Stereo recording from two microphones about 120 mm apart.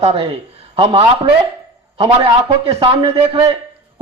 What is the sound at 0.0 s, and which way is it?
A man's voice, 55° right (ahead or behind).